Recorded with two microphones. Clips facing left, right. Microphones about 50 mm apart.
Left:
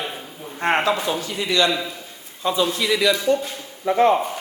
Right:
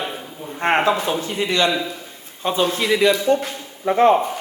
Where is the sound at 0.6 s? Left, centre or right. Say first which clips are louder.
Right 2 dB; right.